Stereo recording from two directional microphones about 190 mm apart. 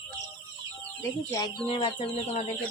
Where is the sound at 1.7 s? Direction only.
25° left (ahead or behind).